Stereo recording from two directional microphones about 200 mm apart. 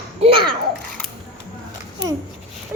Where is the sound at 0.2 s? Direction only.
25° right (ahead or behind).